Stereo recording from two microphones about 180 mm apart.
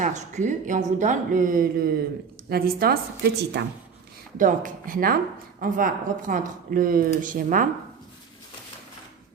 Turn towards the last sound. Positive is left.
turn(degrees=-50)  # may be behind; listen again after turning